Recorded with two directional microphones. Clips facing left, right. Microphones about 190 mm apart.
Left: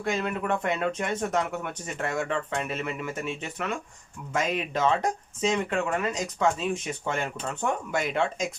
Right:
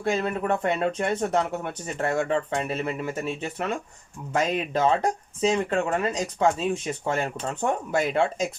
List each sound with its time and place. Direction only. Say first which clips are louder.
0.0 s speech: right 3 dB; 35° right (ahead or behind)